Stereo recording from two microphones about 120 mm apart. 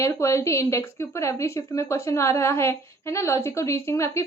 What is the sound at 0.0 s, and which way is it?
Speech, 25° left (ahead or behind).